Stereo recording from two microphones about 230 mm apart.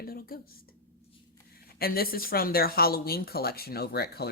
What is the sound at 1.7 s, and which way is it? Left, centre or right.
A woman's voice, left.